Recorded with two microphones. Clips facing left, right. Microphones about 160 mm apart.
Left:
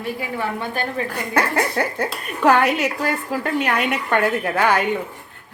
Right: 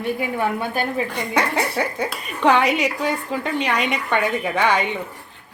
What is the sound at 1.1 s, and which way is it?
A woman's voice, centre (ahead or behind).